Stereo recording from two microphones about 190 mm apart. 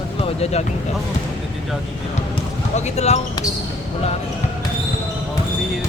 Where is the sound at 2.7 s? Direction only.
35° left (ahead or behind).